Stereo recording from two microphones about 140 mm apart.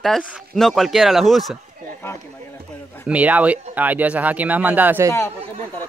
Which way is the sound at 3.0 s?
10° right (ahead or behind).